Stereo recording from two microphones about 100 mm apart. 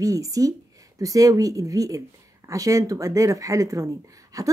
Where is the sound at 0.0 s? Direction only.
35° right (ahead or behind).